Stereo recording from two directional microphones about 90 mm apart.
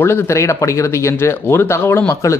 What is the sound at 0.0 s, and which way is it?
Speech, 25° left (ahead or behind).